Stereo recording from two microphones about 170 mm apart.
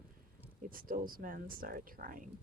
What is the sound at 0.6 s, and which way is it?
Speech, 55° right (ahead or behind).